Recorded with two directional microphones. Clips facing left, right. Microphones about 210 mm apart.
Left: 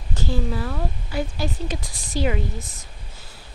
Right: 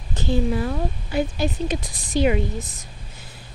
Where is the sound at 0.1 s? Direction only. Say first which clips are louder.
Right 4 dB; 20° right (ahead or behind).